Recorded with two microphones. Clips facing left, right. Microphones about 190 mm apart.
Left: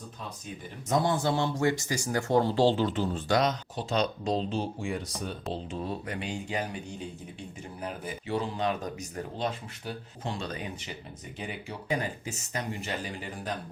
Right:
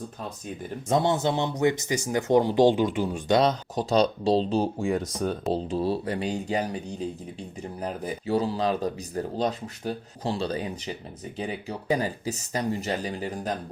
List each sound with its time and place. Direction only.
0.9 s speech: 25° right (ahead or behind)
3.3 s speech: 35° right (ahead or behind)